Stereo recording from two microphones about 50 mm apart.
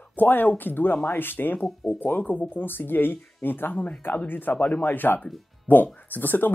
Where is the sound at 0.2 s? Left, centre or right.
Left.